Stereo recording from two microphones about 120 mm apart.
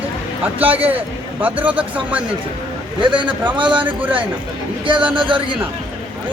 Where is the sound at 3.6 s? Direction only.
40° right (ahead or behind).